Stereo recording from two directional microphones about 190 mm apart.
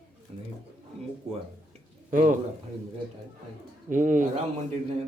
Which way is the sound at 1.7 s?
45° right (ahead or behind).